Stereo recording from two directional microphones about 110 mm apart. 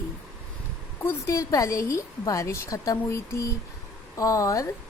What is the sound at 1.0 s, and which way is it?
A woman's voice, 25° left (ahead or behind).